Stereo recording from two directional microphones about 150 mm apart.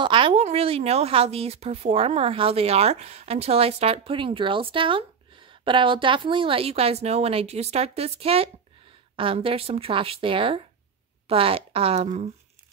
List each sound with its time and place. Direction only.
0.0 s a woman's voice: 35° right (ahead or behind)